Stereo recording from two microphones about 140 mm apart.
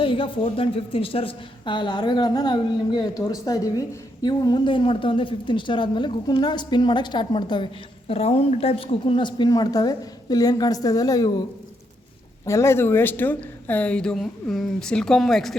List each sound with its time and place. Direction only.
0.0 s a woman's voice: 40° left (ahead or behind)
12.5 s speech: 20° left (ahead or behind); by 15.5 s centre (ahead or behind)